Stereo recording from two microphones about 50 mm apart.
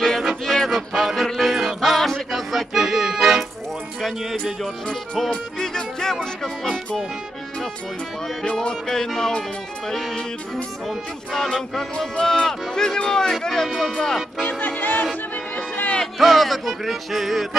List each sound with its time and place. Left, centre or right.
0.5 s music: centre
4.8 s music: centre
8.5 s music: centre
14.6 s music: left
16.0 s music: centre